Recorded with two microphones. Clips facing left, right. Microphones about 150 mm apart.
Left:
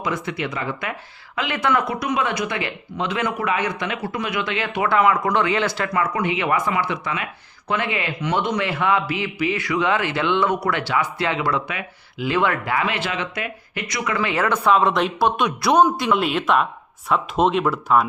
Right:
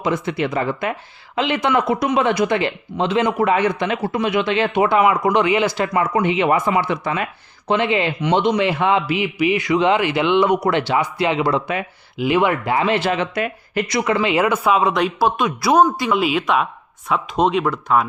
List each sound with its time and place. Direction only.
0.0 s speech: 25° right (ahead or behind)
1.4 s speech: 20° right (ahead or behind)
14.2 s speech: 15° right (ahead or behind); by 18.0 s 5° left (ahead or behind)